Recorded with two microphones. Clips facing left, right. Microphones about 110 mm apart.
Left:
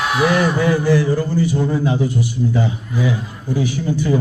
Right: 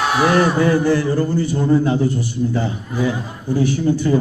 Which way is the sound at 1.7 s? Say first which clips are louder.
Right 3 dB; 10° left (ahead or behind).